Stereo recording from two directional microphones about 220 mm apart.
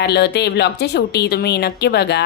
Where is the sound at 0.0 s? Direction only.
50° left (ahead or behind).